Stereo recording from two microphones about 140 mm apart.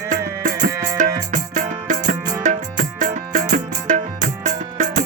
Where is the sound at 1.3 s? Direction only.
60° right (ahead or behind).